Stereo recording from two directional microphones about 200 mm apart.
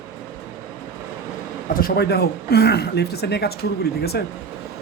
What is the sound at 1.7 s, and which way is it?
Speech, 50° left (ahead or behind).